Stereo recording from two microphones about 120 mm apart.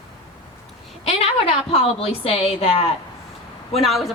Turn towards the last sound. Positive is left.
turn(degrees=0)  # may be behind; listen again after turning